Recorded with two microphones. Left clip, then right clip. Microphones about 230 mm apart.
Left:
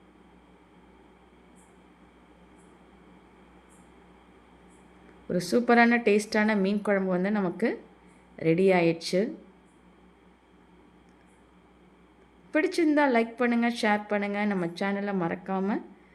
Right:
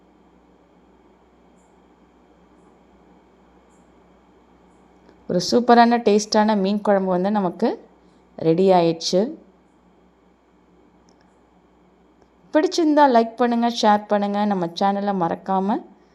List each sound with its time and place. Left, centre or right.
5.3 s a woman's voice: centre
12.5 s a woman's voice: centre